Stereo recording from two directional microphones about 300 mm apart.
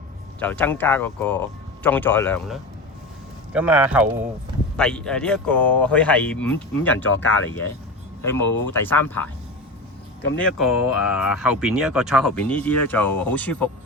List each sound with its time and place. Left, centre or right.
0.3 s speech: centre
8.2 s speech: centre
8.4 s speech: left
8.7 s speech: centre
10.3 s speech: centre